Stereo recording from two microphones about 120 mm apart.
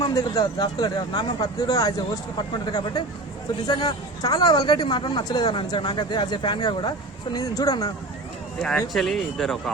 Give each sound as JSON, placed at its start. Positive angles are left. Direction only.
{"t": 0.0, "sound": "speech", "side_deg": 30}
{"t": 3.7, "sound": "speech", "side_deg": 35}
{"t": 7.3, "sound": "speech", "side_deg": 30}
{"t": 8.6, "sound": "speech", "side_deg": 5}